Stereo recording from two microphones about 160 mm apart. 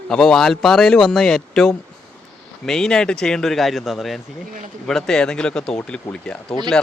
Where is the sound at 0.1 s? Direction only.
5° left (ahead or behind).